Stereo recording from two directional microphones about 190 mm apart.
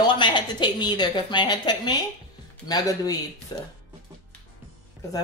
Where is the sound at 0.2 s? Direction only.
25° left (ahead or behind).